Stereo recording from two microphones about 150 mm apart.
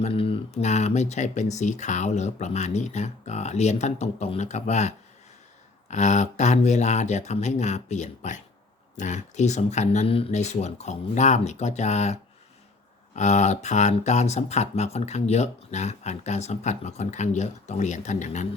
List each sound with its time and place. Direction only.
0.0 s speech: 40° left (ahead or behind)